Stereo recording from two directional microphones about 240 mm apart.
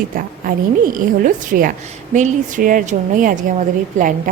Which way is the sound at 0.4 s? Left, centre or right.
Right.